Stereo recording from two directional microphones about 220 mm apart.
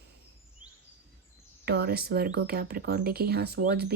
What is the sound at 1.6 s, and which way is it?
Speech, 45° right (ahead or behind).